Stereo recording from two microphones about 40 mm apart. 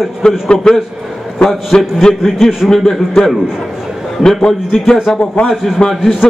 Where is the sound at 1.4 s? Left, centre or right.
Centre.